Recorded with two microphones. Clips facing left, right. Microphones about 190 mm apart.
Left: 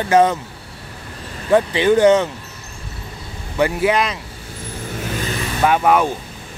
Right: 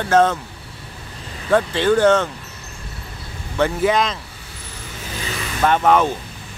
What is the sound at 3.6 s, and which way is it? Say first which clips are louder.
Speech: left 1 dB; 10° left (ahead or behind).